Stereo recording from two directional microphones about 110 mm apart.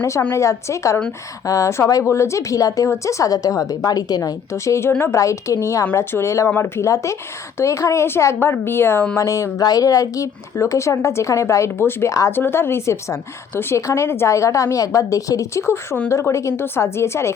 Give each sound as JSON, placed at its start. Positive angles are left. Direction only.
{"t": 0.3, "sound": "speech", "side_deg": 30}